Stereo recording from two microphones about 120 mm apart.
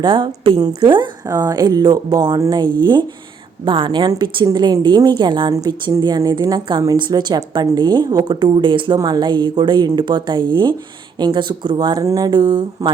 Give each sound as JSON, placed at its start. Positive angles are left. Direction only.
{"t": 0.0, "sound": "a woman's voice", "side_deg": -40}
{"t": 1.3, "sound": "a woman's voice", "side_deg": -30}